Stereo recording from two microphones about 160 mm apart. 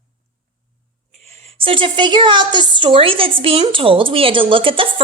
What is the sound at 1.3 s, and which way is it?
A woman's voice, 35° right (ahead or behind).